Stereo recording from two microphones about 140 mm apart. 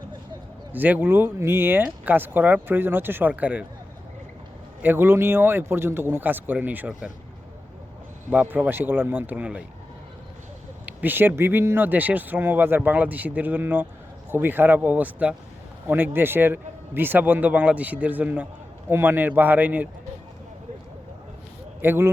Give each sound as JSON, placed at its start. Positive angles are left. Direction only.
{"t": 0.7, "sound": "speech", "side_deg": -15}
{"t": 4.8, "sound": "speech", "side_deg": -15}
{"t": 8.3, "sound": "speech", "side_deg": -10}
{"t": 10.8, "sound": "speech", "side_deg": -15}
{"t": 21.8, "sound": "speech", "side_deg": -15}